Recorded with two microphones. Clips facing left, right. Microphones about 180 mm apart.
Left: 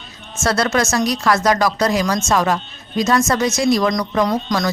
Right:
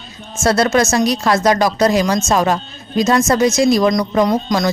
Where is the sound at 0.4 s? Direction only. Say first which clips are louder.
Right 4 dB; 25° right (ahead or behind).